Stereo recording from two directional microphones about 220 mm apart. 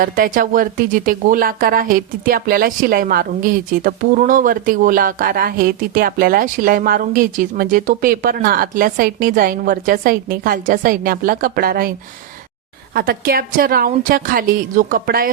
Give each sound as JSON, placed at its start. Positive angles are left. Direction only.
{"t": 0.0, "sound": "speech", "side_deg": -40}
{"t": 12.9, "sound": "speech", "side_deg": -45}